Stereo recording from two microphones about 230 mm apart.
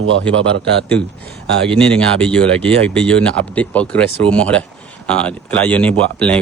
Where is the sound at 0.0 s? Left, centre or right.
Right.